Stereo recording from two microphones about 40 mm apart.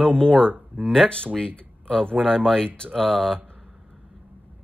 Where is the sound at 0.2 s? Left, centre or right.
Left.